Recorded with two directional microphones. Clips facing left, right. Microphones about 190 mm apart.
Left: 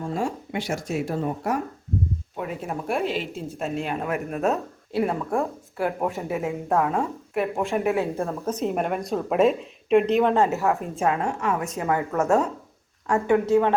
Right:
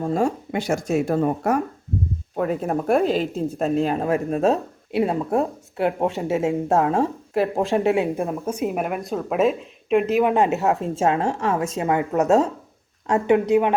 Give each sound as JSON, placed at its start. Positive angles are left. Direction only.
{"t": 0.0, "sound": "speech", "side_deg": -40}
{"t": 7.7, "sound": "speech", "side_deg": -20}
{"t": 10.3, "sound": "speech", "side_deg": -20}
{"t": 11.8, "sound": "speech", "side_deg": -20}